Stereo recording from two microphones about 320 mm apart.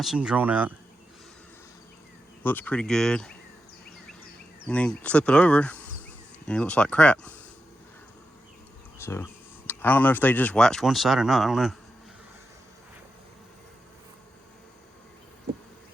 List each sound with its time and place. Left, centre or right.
0.0 s speech: centre
2.4 s speech: centre
4.7 s speech: centre
9.0 s a sound: centre
9.6 s speech: centre